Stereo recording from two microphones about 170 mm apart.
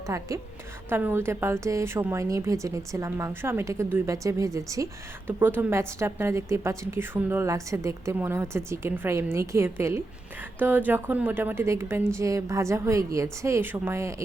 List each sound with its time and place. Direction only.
0.1 s a woman's voice: 15° right (ahead or behind)